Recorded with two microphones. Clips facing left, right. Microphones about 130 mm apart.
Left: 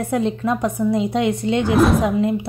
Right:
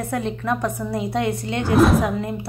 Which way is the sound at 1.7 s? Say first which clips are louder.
Right 1 dB; centre (ahead or behind).